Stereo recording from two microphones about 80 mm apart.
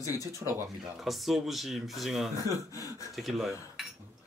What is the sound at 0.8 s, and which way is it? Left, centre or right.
Speech, centre.